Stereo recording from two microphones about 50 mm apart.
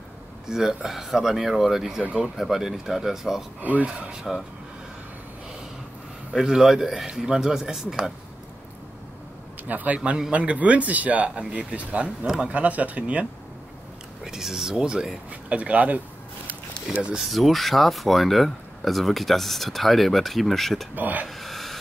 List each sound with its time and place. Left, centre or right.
0.5 s speech: centre
3.7 s a man's voice: right
4.1 s speech: centre
6.3 s speech: centre
9.7 s a man's voice: right
14.2 s speech: centre
15.5 s speech: right
17.2 s speech: centre
20.9 s a man's voice: right
21.3 s a sound: centre